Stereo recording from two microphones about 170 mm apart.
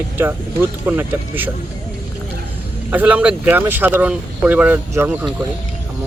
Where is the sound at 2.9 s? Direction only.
10° right (ahead or behind).